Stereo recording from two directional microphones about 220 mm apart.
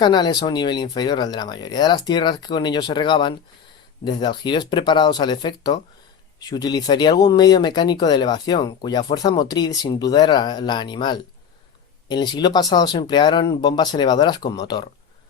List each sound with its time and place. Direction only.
0.0 s speech: 20° left (ahead or behind)